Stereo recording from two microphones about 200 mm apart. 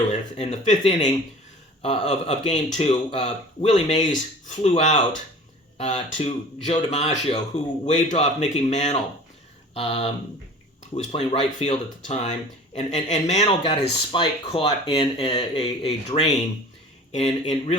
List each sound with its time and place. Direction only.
0.1 s speech: 30° left (ahead or behind)